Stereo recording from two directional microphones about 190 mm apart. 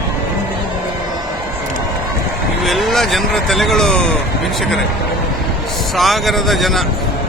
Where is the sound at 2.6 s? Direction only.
Centre (ahead or behind).